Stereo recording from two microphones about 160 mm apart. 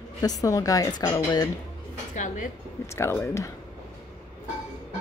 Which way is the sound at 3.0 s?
15° left (ahead or behind).